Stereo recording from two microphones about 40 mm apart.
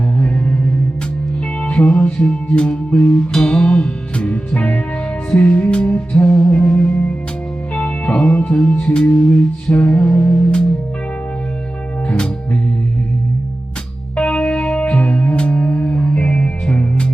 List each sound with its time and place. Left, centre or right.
0.2 s music: left
1.6 s music: left
3.2 s music: left
14.2 s music: left